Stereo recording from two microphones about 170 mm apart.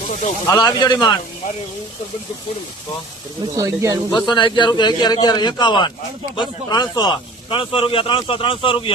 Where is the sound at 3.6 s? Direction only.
20° right (ahead or behind).